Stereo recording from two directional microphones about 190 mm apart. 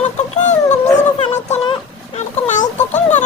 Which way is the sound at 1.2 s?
35° left (ahead or behind).